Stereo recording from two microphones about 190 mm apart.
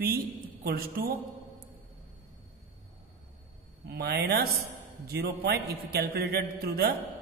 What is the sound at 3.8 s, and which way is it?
A man's voice, 55° right (ahead or behind).